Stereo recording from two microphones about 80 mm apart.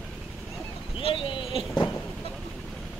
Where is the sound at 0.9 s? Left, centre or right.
Left.